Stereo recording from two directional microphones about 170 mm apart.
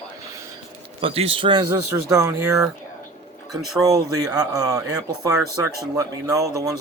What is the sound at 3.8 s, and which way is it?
Speech, 20° right (ahead or behind).